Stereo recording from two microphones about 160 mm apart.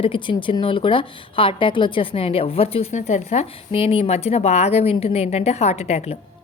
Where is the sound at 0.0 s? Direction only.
30° left (ahead or behind).